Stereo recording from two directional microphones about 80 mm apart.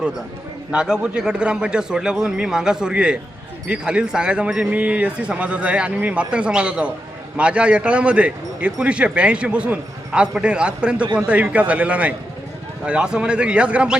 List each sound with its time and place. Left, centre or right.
0.7 s a man's voice: centre